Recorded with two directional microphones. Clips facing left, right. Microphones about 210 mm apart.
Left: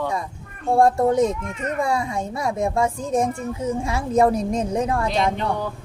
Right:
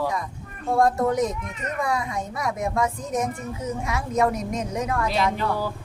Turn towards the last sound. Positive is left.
turn(degrees=30)  # may be behind; listen again after turning